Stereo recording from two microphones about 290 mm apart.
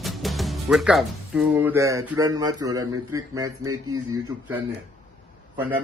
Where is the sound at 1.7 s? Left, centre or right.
Centre.